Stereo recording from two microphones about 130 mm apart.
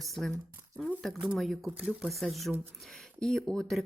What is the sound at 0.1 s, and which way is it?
Speech, centre (ahead or behind).